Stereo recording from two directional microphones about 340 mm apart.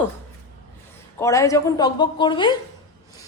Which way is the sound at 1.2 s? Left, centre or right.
Centre.